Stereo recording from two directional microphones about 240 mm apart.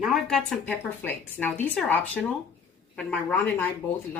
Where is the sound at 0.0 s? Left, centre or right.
Centre.